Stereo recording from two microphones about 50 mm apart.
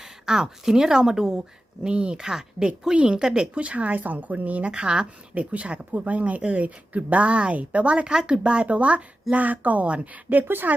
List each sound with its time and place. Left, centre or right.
0.0 s a woman's voice: centre; by 4.7 s right
4.7 s speech: centre
5.3 s speech: right
10.4 s speech: right